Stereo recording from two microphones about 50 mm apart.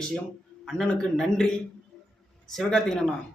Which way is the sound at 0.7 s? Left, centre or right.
Centre.